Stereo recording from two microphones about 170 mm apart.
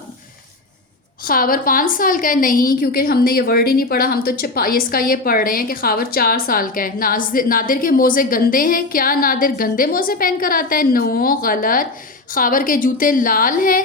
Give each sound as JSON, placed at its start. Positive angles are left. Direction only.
{"t": 1.2, "sound": "a woman's voice", "side_deg": 55}